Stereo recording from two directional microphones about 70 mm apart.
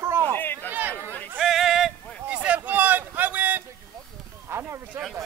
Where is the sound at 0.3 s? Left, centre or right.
Left.